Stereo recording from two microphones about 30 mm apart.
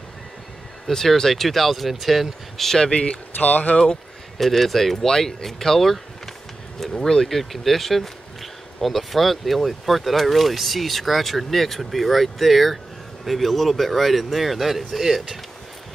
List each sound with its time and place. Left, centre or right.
0.8 s speech: centre
2.9 s speech: left
3.3 s speech: left
3.7 s speech: left
4.4 s speech: centre